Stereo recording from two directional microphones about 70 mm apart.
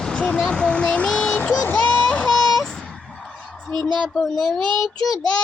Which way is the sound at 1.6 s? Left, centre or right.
Left.